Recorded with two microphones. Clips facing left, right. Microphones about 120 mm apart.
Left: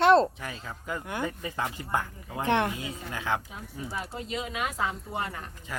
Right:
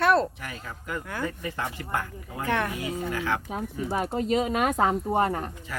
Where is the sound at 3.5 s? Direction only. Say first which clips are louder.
Right 8 dB; 50° right (ahead or behind).